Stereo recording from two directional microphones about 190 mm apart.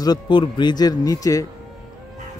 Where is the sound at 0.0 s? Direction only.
25° left (ahead or behind).